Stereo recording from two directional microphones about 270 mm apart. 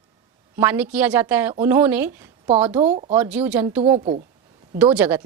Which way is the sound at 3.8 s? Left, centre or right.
Right.